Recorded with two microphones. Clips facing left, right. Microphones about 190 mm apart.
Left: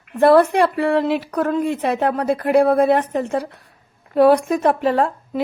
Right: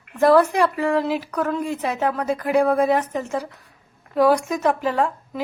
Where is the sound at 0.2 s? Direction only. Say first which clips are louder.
Left 3 dB; 35° left (ahead or behind).